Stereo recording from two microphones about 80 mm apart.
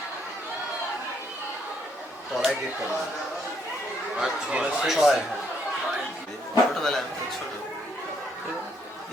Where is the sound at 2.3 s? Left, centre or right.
Centre.